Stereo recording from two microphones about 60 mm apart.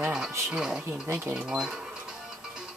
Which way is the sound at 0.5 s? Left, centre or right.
Centre.